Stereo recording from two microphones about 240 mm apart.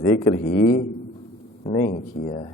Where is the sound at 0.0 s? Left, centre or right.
Left.